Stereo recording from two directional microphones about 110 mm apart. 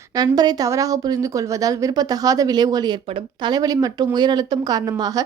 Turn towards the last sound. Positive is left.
turn(degrees=-35)  # may be behind; listen again after turning